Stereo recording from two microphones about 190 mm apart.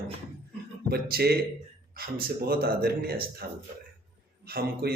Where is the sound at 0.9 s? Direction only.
55° right (ahead or behind).